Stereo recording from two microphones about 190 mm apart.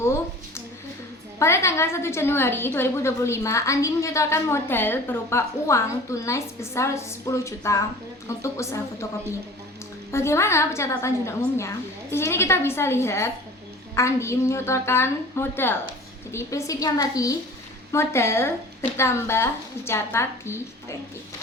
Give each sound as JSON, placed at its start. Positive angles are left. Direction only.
{"t": 0.0, "sound": "a sound", "side_deg": 15}
{"t": 1.4, "sound": "a woman's voice", "side_deg": 15}
{"t": 10.1, "sound": "a woman's voice", "side_deg": 15}